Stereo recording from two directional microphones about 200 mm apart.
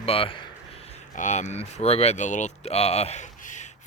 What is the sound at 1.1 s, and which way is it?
Speech, 35° left (ahead or behind).